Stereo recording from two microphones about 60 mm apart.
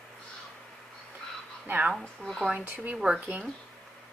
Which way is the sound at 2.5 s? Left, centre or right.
Right.